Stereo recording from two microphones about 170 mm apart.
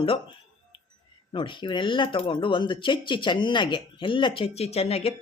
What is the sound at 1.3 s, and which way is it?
A man's voice, 30° left (ahead or behind).